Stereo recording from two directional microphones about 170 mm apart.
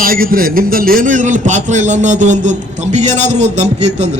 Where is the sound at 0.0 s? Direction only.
60° right (ahead or behind).